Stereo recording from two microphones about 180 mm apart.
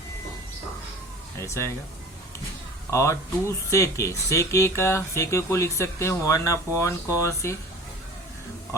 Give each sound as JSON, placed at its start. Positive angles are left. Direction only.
{"t": 1.4, "sound": "speech", "side_deg": 15}
{"t": 2.9, "sound": "speech", "side_deg": 15}